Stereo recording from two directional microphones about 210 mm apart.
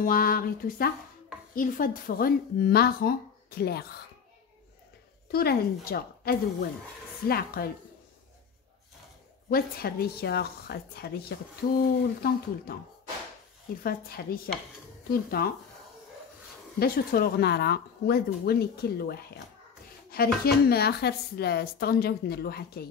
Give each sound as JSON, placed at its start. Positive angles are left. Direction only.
{"t": 0.0, "sound": "a woman's voice", "side_deg": 45}
{"t": 5.3, "sound": "a woman's voice", "side_deg": 45}
{"t": 9.5, "sound": "a woman's voice", "side_deg": 45}
{"t": 13.8, "sound": "a woman's voice", "side_deg": 45}
{"t": 16.8, "sound": "a woman's voice", "side_deg": 45}